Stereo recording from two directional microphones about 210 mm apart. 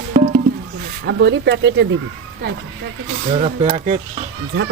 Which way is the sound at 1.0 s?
60° right (ahead or behind).